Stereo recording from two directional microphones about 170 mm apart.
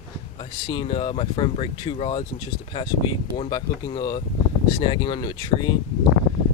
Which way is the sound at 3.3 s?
25° left (ahead or behind).